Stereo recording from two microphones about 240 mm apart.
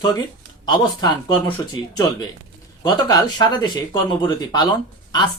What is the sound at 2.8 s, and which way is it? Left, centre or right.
Speech, centre.